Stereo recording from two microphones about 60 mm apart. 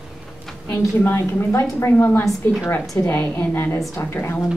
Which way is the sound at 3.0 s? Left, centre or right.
Left.